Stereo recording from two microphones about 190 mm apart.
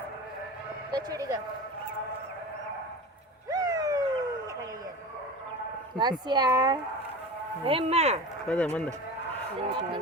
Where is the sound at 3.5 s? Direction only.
20° right (ahead or behind).